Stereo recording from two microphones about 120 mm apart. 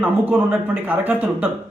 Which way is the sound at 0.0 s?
15° right (ahead or behind).